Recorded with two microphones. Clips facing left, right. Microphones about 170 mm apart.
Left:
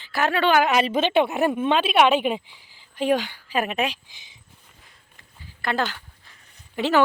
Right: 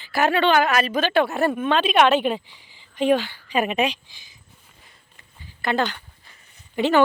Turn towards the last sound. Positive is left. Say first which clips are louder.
# right 2 dB
turn(degrees=0)  # may be behind; listen again after turning